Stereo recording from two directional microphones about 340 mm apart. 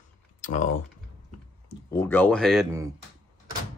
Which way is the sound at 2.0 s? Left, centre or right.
Centre.